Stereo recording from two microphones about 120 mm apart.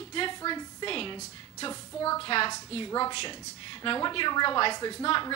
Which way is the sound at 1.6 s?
30° left (ahead or behind).